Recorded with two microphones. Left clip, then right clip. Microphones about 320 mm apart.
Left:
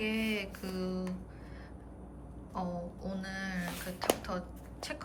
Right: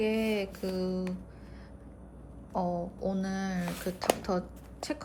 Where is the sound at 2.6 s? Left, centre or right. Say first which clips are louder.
Right 7 dB; centre.